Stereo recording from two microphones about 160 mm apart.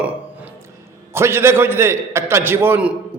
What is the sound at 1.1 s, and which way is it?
A man's voice, 15° right (ahead or behind).